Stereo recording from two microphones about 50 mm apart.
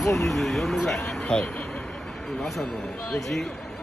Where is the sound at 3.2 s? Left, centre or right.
Centre.